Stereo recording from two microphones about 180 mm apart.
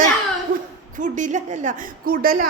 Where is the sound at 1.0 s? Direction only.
45° right (ahead or behind).